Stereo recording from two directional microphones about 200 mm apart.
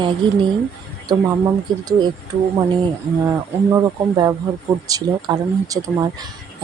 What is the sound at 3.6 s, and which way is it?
Speech, 15° right (ahead or behind).